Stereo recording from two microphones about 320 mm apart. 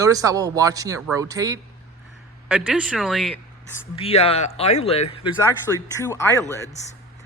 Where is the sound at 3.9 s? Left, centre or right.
Centre.